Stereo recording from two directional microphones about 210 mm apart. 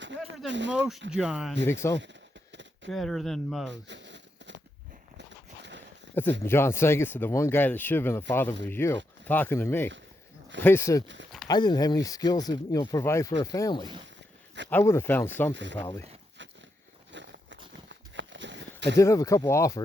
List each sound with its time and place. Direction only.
0.4 s speech: 60° right (ahead or behind)
0.7 s speech: 5° right (ahead or behind)
1.6 s speech: 15° left (ahead or behind)
2.5 s a sound: 60° right (ahead or behind)
2.9 s speech: centre (ahead or behind)
3.7 s a sound: 60° right (ahead or behind)
6.4 s speech: 10° left (ahead or behind)
15.5 s speech: 60° right (ahead or behind)
17.1 s a sound: 60° right (ahead or behind)
18.9 s speech: 15° left (ahead or behind)